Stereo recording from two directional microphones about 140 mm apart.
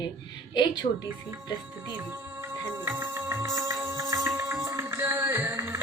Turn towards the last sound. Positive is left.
turn(degrees=-20)  # may be behind; listen again after turning